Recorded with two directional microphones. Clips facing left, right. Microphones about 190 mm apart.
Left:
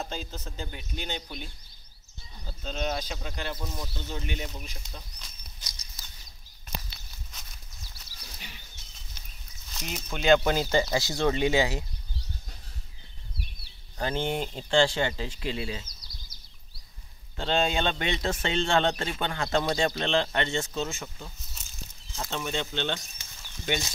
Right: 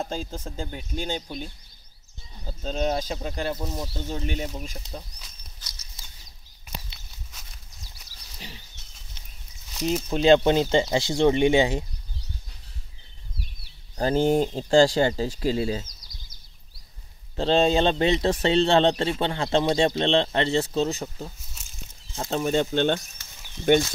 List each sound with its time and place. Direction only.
0.1 s a man's voice: 45° right (ahead or behind)
2.6 s a man's voice: 35° right (ahead or behind)
9.8 s speech: 30° right (ahead or behind)
13.9 s a man's voice: 40° right (ahead or behind)
17.4 s a man's voice: 35° right (ahead or behind); by 23.8 s 55° right (ahead or behind)